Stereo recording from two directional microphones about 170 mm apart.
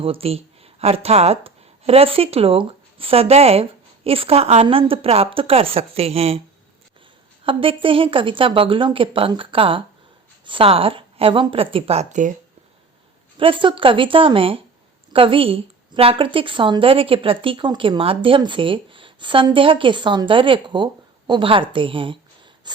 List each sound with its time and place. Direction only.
0.0 s a woman's voice: 35° right (ahead or behind)
7.4 s a woman's voice: 30° right (ahead or behind)
13.3 s a woman's voice: 30° right (ahead or behind)
22.7 s mechanisms: 25° right (ahead or behind)